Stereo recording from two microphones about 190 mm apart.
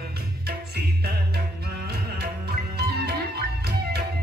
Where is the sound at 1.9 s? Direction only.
60° right (ahead or behind).